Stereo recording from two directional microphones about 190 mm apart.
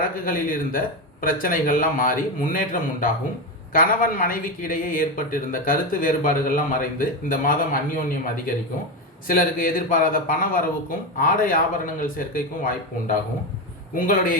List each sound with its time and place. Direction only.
0.3 s speech: 45° left (ahead or behind)
9.2 s speech: 45° left (ahead or behind)